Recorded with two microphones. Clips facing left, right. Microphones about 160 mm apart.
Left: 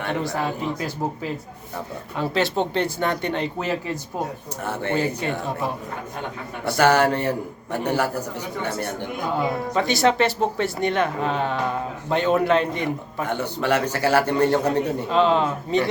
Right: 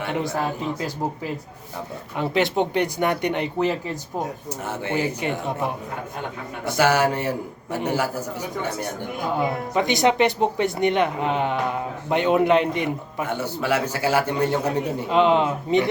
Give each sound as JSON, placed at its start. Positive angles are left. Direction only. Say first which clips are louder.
{"t": 0.0, "sound": "speech", "louder": "even", "side_deg": -15}
{"t": 2.1, "sound": "a man's voice", "louder": "right 1 dB", "side_deg": -20}